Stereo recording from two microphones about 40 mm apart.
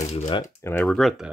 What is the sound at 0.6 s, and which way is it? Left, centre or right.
Speech, left.